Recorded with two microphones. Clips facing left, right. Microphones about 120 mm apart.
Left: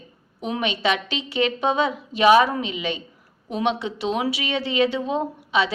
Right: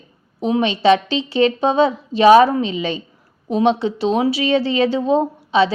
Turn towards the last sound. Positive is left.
turn(degrees=-30)  # may be behind; listen again after turning